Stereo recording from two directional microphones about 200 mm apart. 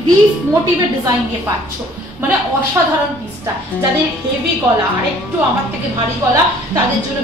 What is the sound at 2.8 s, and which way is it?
Speech, 15° right (ahead or behind).